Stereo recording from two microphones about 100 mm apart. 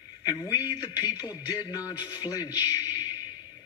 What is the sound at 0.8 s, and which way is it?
A man's voice, 45° left (ahead or behind).